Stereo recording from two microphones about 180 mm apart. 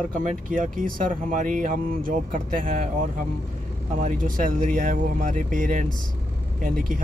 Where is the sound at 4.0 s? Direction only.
45° right (ahead or behind).